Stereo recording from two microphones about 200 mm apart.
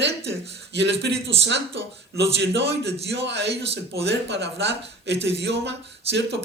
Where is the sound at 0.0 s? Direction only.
60° right (ahead or behind).